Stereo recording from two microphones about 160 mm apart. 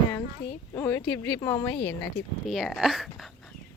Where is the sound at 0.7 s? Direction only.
15° left (ahead or behind).